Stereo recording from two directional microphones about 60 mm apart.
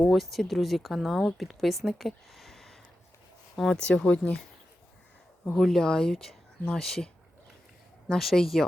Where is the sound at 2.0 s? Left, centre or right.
Centre.